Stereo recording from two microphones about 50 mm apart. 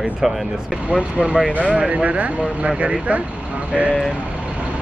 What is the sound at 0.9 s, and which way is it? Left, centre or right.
Speech, centre.